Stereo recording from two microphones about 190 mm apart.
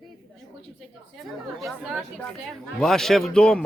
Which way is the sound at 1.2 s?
Centre (ahead or behind).